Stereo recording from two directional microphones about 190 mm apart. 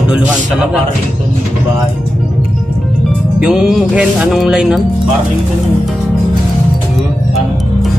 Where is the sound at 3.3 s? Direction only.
5° right (ahead or behind).